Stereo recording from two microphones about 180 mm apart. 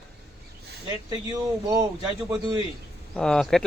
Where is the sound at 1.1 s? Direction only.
20° right (ahead or behind).